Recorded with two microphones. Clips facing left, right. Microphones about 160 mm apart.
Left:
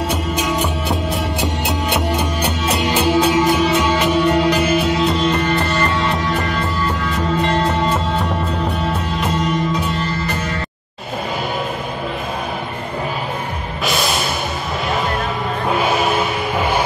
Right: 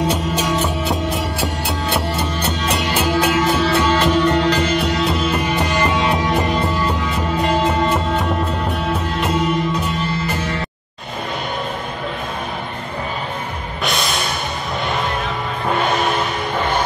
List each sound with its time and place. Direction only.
0.1 s music: 10° left (ahead or behind); by 6.6 s 20° right (ahead or behind)
7.4 s music: 5° right (ahead or behind)
13.8 s music: centre (ahead or behind)
15.7 s music: 5° left (ahead or behind)